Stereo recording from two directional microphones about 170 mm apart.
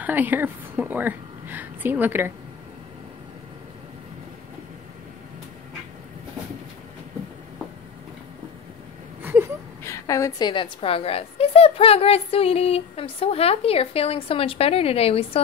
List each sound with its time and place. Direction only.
0.0 s a woman's voice: 10° right (ahead or behind)
9.2 s whimper: 10° right (ahead or behind)
9.8 s a woman's voice: 20° left (ahead or behind)
10.5 s a woman's voice: 30° left (ahead or behind)